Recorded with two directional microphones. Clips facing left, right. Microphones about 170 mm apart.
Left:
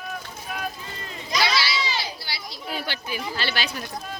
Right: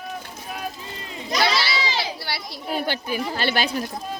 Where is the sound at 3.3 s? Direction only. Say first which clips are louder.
Right 6 dB; 50° right (ahead or behind).